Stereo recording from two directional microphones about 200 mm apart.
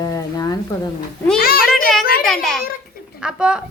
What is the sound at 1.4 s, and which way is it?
Speech, 50° left (ahead or behind).